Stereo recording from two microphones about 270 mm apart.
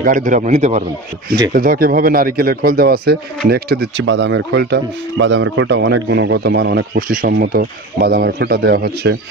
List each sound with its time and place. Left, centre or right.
0.0 s a man's voice: right